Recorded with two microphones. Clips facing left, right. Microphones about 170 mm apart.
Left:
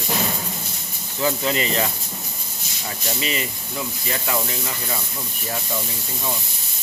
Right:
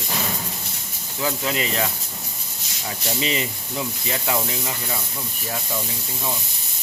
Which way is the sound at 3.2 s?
25° right (ahead or behind).